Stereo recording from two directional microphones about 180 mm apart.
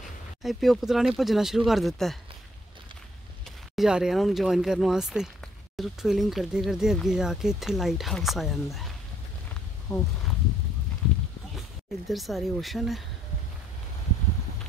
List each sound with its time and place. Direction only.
0.4 s speech: centre (ahead or behind)
3.7 s speech: 5° right (ahead or behind)
9.9 s speech: 20° left (ahead or behind)
12.1 s speech: centre (ahead or behind)